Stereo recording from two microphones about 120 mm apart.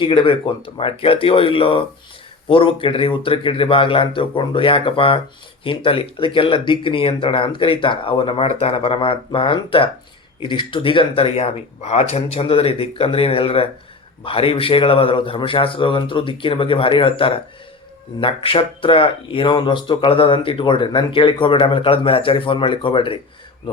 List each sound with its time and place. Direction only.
0.0 s speech: 45° left (ahead or behind)